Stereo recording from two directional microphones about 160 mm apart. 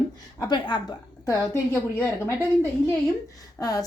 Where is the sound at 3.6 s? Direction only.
20° left (ahead or behind).